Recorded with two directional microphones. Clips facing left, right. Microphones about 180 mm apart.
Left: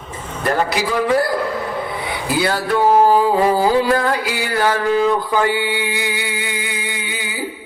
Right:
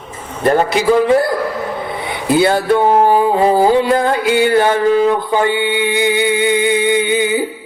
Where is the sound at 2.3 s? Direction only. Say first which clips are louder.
Right 7 dB; 25° right (ahead or behind).